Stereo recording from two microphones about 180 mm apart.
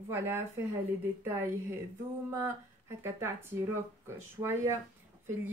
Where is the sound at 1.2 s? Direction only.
15° right (ahead or behind).